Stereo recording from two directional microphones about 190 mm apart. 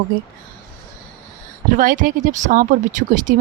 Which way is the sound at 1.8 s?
45° right (ahead or behind).